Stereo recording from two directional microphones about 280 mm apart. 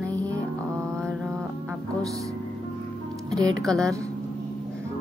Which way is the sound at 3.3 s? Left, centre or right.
Centre.